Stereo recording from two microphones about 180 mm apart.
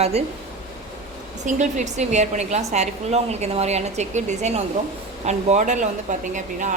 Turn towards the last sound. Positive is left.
turn(degrees=-45)  # may be behind; listen again after turning